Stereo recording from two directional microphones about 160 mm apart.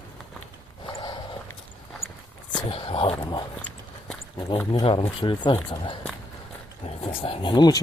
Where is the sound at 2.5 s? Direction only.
35° left (ahead or behind).